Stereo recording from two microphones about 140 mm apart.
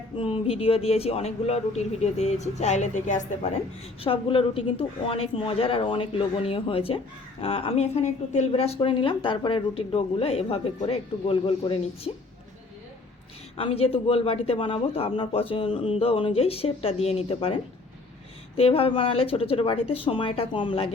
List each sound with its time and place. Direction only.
0.2 s a man's voice: 40° left (ahead or behind); by 3.5 s 60° left (ahead or behind)
4.0 s a woman's voice: 40° left (ahead or behind)
13.6 s a man's voice: 45° left (ahead or behind)